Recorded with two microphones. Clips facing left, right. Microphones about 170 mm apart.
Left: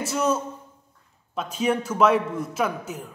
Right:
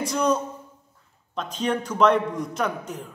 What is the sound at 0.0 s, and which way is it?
A man's voice, 5° left (ahead or behind).